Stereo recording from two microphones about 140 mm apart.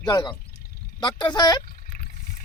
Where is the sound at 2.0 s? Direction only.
65° left (ahead or behind).